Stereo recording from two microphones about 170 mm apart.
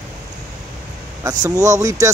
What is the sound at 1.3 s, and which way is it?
Speech, 20° right (ahead or behind).